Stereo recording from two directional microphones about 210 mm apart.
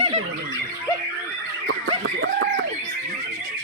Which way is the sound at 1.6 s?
70° right (ahead or behind).